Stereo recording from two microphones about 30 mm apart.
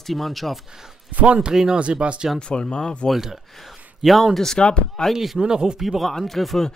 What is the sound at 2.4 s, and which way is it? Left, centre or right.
Speech, left.